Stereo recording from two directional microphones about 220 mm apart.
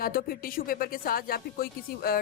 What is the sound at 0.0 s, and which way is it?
Speech, 40° left (ahead or behind).